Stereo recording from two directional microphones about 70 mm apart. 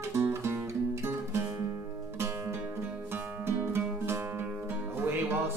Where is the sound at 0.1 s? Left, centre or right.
Right.